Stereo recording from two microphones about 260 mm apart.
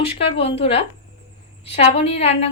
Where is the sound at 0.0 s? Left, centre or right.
Left.